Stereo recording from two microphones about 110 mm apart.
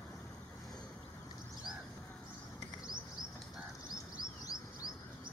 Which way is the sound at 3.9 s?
35° left (ahead or behind).